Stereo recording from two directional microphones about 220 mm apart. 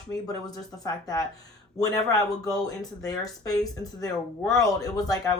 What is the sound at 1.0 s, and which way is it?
Speech, 15° left (ahead or behind).